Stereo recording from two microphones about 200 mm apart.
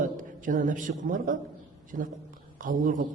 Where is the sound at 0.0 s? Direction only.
40° right (ahead or behind).